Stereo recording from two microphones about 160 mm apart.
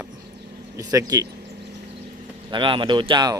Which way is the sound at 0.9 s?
20° right (ahead or behind).